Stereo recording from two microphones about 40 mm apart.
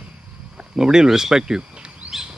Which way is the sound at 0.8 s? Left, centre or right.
Centre.